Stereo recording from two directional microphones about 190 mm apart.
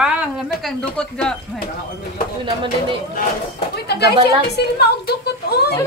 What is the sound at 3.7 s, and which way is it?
A woman's voice, 60° left (ahead or behind).